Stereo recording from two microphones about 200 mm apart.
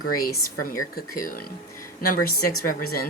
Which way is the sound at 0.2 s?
45° left (ahead or behind).